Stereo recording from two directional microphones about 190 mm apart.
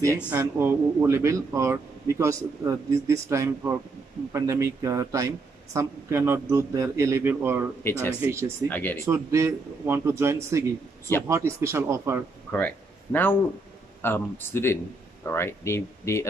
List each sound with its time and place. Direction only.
0.3 s speech: 10° right (ahead or behind)
7.8 s speech: 10° left (ahead or behind)
8.2 s speech: 15° right (ahead or behind)
8.6 s speech: 10° left (ahead or behind)
9.0 s speech: 15° right (ahead or behind)
12.5 s speech: 10° left (ahead or behind)